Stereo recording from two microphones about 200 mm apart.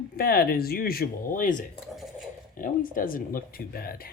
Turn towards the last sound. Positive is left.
turn(degrees=50)  # may be behind; listen again after turning